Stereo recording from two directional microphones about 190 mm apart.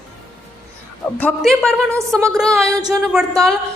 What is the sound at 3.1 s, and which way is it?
Speech, centre (ahead or behind).